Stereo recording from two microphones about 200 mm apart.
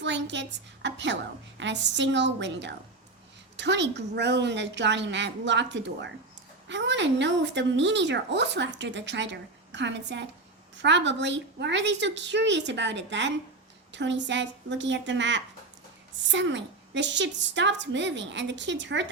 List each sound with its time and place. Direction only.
0.0 s a woman's voice: 60° right (ahead or behind)